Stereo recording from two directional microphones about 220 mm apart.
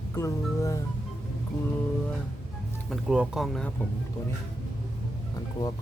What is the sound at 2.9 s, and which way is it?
Speech, 5° right (ahead or behind).